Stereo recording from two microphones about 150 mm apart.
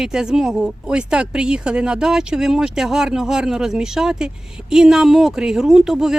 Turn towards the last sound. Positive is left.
turn(degrees=-5)  # may be behind; listen again after turning